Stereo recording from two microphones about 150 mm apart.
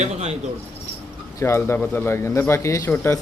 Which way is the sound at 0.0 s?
45° right (ahead or behind).